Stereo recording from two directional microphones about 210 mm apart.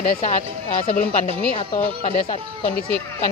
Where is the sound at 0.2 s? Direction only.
35° left (ahead or behind).